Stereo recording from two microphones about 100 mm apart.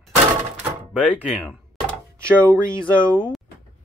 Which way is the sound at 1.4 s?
15° left (ahead or behind).